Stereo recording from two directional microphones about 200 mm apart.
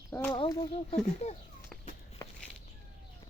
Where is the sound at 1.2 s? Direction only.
35° left (ahead or behind).